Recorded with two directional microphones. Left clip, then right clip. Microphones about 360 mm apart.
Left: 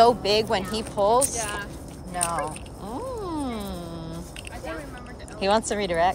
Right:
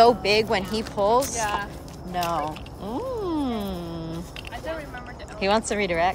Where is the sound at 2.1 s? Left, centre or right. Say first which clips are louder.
Right 2 dB; centre.